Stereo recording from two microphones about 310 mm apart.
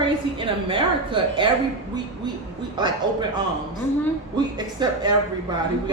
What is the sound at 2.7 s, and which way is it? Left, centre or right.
Speech, centre.